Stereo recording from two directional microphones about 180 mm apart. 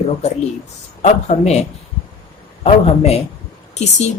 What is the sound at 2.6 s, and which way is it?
Speech, 35° left (ahead or behind).